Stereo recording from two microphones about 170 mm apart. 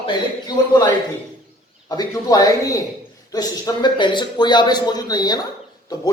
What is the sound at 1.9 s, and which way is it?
Speech, 20° left (ahead or behind).